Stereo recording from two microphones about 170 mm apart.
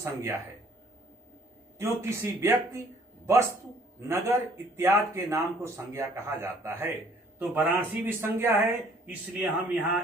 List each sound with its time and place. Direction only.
0.0 s speech: 15° right (ahead or behind)
1.8 s speech: 15° right (ahead or behind)
4.1 s speech: 15° right (ahead or behind)